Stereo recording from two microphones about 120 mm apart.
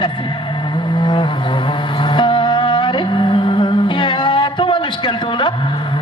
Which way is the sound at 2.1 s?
40° left (ahead or behind).